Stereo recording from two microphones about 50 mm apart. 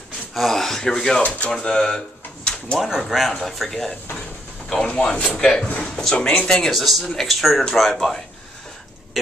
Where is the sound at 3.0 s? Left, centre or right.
Centre.